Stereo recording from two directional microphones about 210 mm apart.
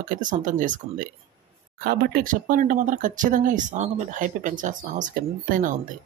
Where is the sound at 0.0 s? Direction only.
40° right (ahead or behind).